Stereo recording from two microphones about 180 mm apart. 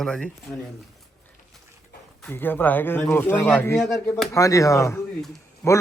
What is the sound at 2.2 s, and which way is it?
Speech, 10° left (ahead or behind).